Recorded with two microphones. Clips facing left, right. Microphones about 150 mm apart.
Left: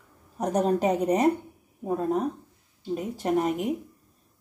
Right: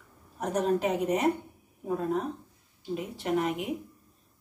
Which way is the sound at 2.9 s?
40° left (ahead or behind).